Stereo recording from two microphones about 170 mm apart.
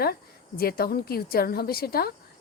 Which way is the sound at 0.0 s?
65° left (ahead or behind).